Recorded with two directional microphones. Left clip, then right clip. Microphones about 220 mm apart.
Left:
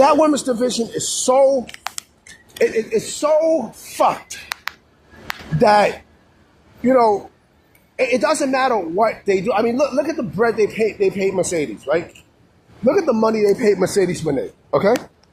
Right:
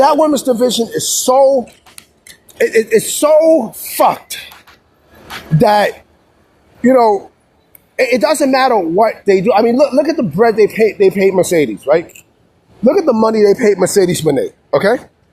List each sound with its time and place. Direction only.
0.0 s speech: 20° right (ahead or behind)
2.2 s speech: 45° right (ahead or behind)
5.5 s speech: 40° right (ahead or behind)
13.6 s speech: 5° right (ahead or behind)
14.1 s speech: 30° right (ahead or behind)
14.7 s speech: centre (ahead or behind)